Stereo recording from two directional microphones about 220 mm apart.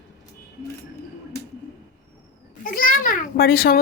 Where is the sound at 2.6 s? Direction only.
40° left (ahead or behind).